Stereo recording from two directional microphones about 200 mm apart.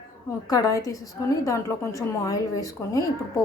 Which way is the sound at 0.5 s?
15° left (ahead or behind).